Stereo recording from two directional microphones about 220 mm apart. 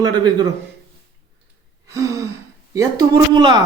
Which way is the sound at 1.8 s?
15° right (ahead or behind).